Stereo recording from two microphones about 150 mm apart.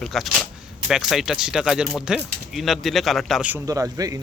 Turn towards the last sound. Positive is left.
turn(degrees=-20)  # may be behind; listen again after turning